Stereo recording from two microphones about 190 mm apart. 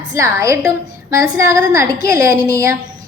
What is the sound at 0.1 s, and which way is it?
A woman's voice, 15° right (ahead or behind).